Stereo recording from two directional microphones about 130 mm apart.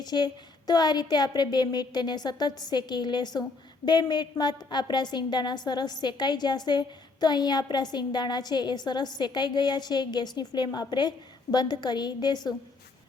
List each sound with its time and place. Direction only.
0.0 s a woman's voice: 30° left (ahead or behind)